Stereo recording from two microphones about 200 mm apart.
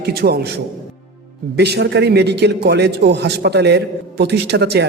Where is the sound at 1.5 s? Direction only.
55° right (ahead or behind).